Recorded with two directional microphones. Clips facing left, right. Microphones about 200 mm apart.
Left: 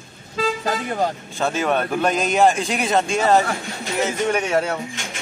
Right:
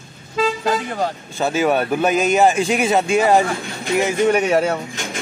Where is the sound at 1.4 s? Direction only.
5° right (ahead or behind).